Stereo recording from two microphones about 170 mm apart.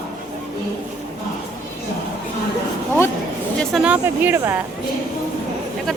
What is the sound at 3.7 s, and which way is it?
Speech, 5° right (ahead or behind).